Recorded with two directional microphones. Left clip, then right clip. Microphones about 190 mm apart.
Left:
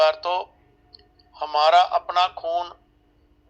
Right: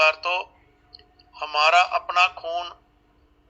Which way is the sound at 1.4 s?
25° left (ahead or behind).